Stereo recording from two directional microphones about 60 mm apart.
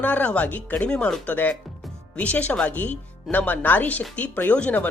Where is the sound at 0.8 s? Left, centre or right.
Centre.